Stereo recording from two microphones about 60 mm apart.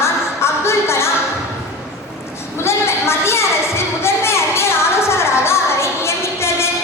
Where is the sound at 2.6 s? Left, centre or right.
Left.